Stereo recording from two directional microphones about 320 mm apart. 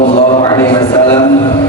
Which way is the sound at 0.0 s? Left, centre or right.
Left.